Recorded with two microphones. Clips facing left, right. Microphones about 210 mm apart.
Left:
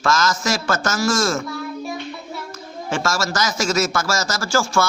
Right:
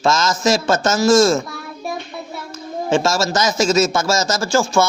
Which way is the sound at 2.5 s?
25° right (ahead or behind).